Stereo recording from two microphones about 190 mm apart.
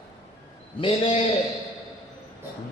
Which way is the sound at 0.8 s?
25° left (ahead or behind).